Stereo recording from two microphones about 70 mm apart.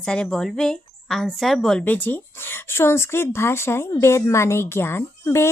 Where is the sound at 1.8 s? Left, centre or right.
Left.